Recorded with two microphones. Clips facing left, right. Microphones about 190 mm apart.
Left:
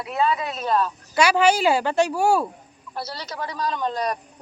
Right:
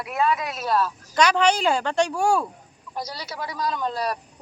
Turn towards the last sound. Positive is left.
turn(degrees=-5)  # may be behind; listen again after turning